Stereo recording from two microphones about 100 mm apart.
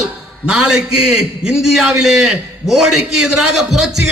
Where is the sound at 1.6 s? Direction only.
5° right (ahead or behind).